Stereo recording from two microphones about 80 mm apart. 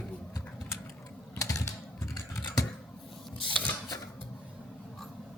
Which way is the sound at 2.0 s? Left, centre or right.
Left.